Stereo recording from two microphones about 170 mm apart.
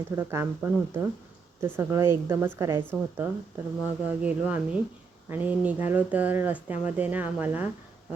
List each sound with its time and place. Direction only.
0.2 s a woman's voice: 15° right (ahead or behind)
3.8 s speech: 10° right (ahead or behind)